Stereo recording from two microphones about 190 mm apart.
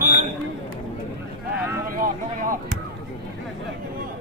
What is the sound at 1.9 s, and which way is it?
Speech, 45° right (ahead or behind).